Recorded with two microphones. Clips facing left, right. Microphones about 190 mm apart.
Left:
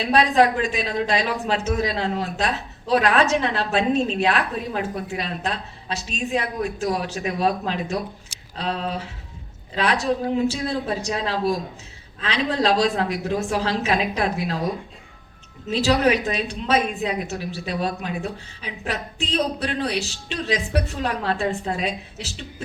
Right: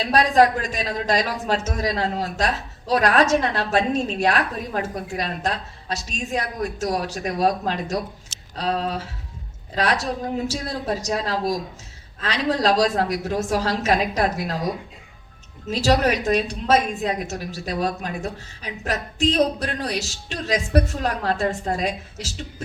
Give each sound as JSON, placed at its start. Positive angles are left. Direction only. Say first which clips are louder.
{"t": 0.0, "sound": "a woman's voice", "louder": "right 1 dB", "side_deg": -40}
{"t": 10.5, "sound": "a woman's voice", "louder": "left 1 dB", "side_deg": -40}
{"t": 15.7, "sound": "a woman's voice", "louder": "left 1 dB", "side_deg": -40}